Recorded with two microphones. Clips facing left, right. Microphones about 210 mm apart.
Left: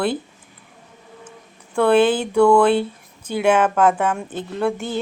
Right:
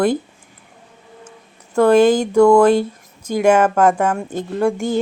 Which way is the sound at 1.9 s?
40° right (ahead or behind).